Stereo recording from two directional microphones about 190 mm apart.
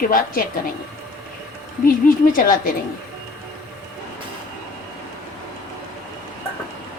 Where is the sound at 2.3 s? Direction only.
50° left (ahead or behind).